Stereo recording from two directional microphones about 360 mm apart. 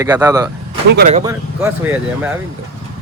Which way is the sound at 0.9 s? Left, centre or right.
Right.